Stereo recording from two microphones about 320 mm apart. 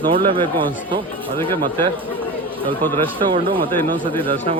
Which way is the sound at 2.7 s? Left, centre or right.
Centre.